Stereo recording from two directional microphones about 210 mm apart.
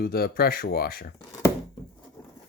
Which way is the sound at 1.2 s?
15° left (ahead or behind).